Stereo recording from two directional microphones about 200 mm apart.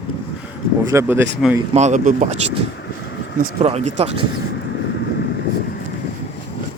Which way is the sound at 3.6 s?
30° right (ahead or behind).